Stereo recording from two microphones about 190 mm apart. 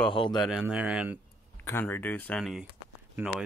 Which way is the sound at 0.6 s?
5° right (ahead or behind).